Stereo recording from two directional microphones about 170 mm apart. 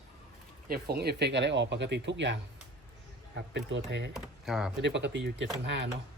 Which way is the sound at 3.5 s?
90° right.